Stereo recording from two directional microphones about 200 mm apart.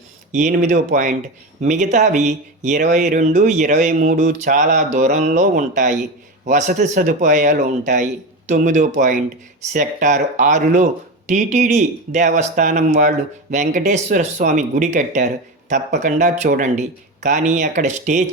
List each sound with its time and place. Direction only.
0.3 s speech: 40° right (ahead or behind)